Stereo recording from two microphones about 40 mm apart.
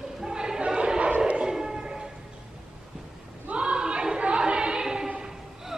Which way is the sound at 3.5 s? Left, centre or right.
Right.